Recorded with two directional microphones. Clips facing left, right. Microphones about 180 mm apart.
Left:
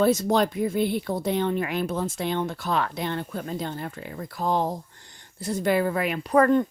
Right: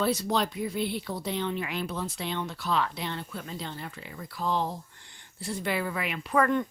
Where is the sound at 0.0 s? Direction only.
45° left (ahead or behind).